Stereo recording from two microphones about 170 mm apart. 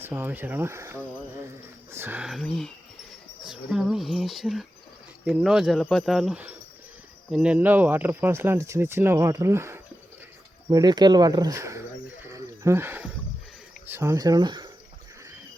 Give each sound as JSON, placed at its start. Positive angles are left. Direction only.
{"t": 0.0, "sound": "speech", "side_deg": -10}
{"t": 12.2, "sound": "a sound", "side_deg": -15}
{"t": 13.8, "sound": "speech", "side_deg": -15}